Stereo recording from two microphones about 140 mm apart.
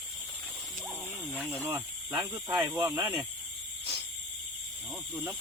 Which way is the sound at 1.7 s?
25° right (ahead or behind).